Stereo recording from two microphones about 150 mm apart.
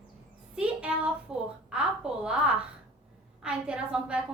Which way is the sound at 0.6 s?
10° right (ahead or behind).